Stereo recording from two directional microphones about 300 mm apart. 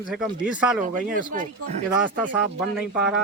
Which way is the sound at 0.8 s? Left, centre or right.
Right.